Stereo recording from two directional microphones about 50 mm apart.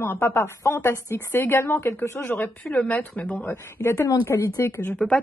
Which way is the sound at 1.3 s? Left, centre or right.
Left.